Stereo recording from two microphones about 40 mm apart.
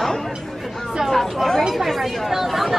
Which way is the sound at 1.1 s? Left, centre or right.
Centre.